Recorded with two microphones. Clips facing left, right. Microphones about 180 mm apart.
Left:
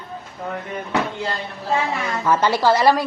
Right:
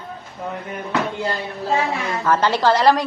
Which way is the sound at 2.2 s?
10° left (ahead or behind).